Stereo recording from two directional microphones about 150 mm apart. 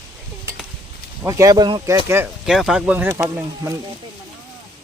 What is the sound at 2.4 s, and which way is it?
Speech, 5° right (ahead or behind).